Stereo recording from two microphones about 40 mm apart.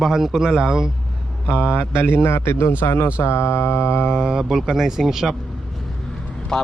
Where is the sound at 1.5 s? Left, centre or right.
Left.